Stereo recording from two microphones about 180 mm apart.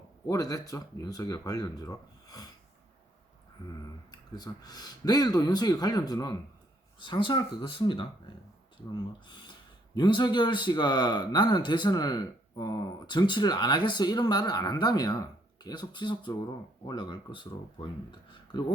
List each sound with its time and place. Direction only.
0.3 s a man's voice: 20° left (ahead or behind)
4.1 s a man's voice: 20° left (ahead or behind)
9.2 s a man's voice: 25° left (ahead or behind)